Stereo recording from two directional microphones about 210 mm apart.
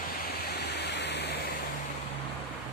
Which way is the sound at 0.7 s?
55° left (ahead or behind).